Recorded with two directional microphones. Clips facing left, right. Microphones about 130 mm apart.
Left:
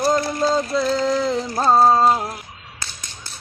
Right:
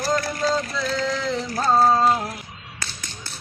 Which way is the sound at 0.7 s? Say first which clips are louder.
Left 6 dB; 35° left (ahead or behind).